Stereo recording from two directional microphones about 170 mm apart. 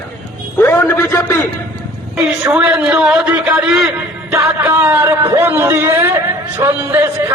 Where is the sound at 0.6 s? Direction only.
15° left (ahead or behind).